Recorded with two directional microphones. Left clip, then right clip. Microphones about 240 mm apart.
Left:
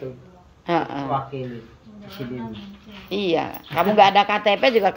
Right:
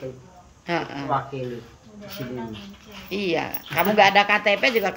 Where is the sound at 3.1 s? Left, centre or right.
Centre.